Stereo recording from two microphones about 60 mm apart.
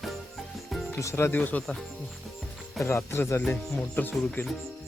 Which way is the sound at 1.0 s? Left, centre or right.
Left.